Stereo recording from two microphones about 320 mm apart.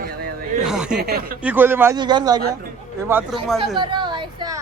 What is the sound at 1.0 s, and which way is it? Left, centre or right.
Speech, right.